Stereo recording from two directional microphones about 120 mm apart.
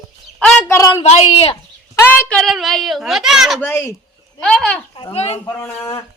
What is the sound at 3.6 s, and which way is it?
Speech, 20° left (ahead or behind).